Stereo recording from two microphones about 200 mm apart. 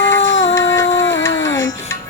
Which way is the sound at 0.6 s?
15° left (ahead or behind).